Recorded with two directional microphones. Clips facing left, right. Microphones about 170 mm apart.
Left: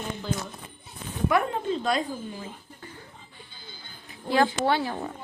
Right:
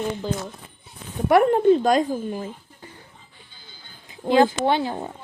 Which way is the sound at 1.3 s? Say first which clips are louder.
Right 11 dB; 55° right (ahead or behind).